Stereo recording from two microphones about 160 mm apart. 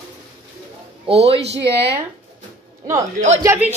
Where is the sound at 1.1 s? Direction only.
35° right (ahead or behind).